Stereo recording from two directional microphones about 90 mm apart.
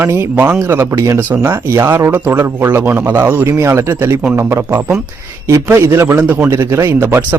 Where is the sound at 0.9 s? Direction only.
35° right (ahead or behind).